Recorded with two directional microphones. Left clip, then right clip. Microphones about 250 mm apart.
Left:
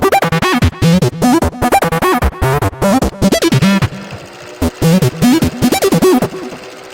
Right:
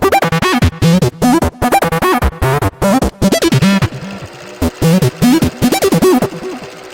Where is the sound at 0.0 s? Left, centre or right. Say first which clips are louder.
Even; centre.